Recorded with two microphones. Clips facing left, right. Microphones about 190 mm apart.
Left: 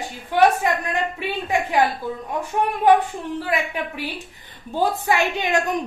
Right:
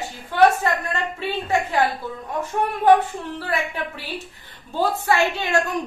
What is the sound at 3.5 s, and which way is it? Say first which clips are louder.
Speech: right 1 dB; 15° left (ahead or behind).